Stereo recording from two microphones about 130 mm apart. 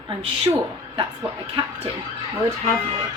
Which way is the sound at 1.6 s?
40° right (ahead or behind).